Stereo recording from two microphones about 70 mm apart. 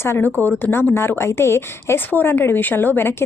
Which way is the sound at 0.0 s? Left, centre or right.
Left.